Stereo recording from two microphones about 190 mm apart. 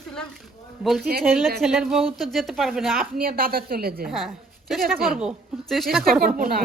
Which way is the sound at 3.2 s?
50° right (ahead or behind).